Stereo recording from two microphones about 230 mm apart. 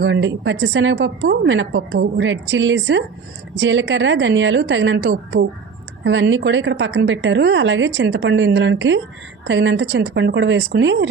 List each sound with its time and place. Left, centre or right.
0.0 s a woman's voice: right